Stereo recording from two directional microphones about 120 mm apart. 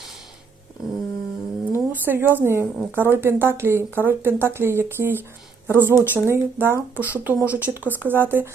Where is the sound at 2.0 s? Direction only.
15° right (ahead or behind).